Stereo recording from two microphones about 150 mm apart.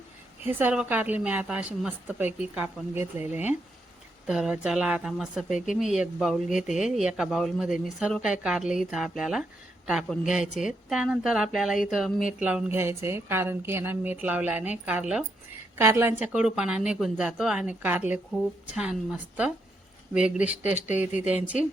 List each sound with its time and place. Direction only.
0.4 s a woman's voice: 10° right (ahead or behind)
20.1 s a woman's voice: 5° right (ahead or behind)